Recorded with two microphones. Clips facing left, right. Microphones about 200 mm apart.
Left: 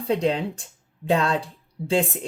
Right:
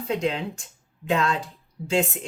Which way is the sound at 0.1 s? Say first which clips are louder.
Left 4 dB; 35° left (ahead or behind).